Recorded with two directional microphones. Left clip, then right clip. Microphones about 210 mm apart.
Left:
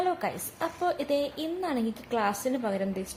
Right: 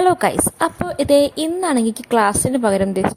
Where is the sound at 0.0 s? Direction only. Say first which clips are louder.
Right 14 dB; 45° right (ahead or behind).